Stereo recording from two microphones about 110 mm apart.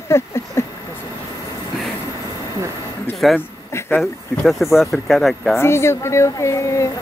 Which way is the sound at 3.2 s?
Centre (ahead or behind).